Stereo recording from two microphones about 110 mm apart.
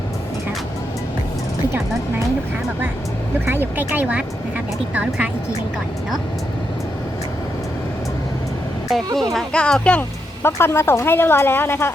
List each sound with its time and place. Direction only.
3.4 s speech: 20° right (ahead or behind)
9.3 s speech: 10° left (ahead or behind)
10.4 s speech: 20° left (ahead or behind)